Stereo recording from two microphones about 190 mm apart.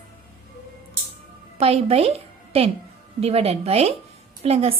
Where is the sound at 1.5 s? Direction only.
30° right (ahead or behind).